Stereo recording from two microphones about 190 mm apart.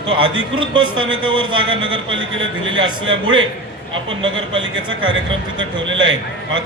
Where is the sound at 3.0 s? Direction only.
85° right.